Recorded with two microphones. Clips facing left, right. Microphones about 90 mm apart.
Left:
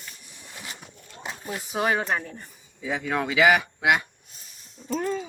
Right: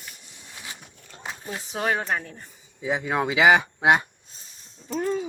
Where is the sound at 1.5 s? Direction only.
5° left (ahead or behind).